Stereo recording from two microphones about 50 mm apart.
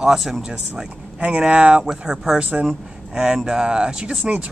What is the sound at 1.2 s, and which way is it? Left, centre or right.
Speech, right.